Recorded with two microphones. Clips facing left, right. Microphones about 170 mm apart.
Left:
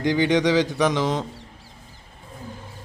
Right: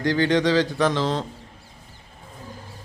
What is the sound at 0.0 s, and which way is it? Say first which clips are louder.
A man's voice: left 1 dB; 20° left (ahead or behind).